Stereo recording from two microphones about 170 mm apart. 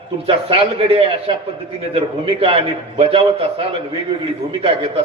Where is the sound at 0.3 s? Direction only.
35° right (ahead or behind).